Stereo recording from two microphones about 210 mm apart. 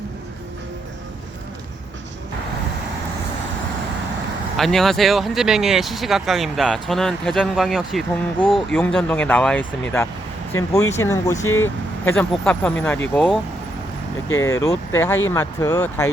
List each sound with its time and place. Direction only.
4.5 s speech: centre (ahead or behind)
11.4 s speech: 70° left (ahead or behind)
12.0 s speech: 5° left (ahead or behind)
14.3 s speech: 15° left (ahead or behind)